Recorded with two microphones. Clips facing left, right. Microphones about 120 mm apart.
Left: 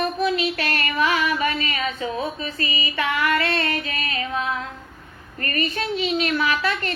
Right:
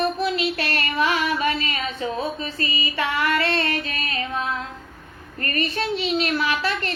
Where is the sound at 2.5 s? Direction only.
30° right (ahead or behind).